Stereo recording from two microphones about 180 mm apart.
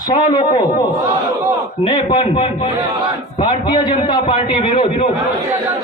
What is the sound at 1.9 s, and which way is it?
A man's voice, 25° left (ahead or behind).